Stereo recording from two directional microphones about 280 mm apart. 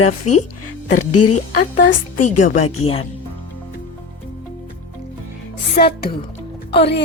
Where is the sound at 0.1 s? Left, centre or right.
Left.